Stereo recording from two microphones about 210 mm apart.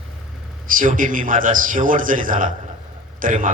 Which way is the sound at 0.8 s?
40° right (ahead or behind).